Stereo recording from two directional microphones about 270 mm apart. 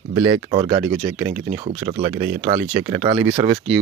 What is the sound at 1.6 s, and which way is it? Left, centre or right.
Speech, right.